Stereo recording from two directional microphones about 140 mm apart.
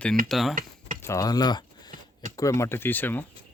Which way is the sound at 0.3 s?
Centre (ahead or behind).